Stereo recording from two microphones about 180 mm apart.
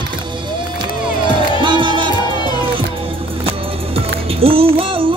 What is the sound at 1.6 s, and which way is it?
Music, 25° right (ahead or behind).